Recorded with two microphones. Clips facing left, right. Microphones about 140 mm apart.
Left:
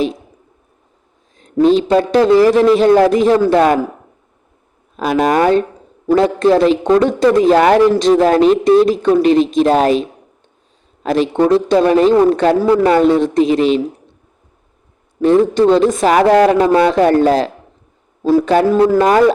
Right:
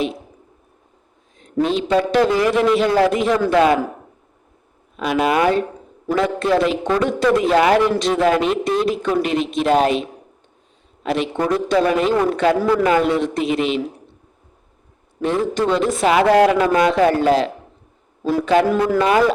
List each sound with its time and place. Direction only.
1.4 s a man's voice: 35° left (ahead or behind)
4.9 s a man's voice: 40° left (ahead or behind)
11.0 s a man's voice: 35° left (ahead or behind)
15.2 s a man's voice: 35° left (ahead or behind)